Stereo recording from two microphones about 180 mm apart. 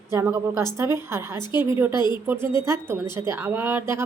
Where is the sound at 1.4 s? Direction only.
25° left (ahead or behind).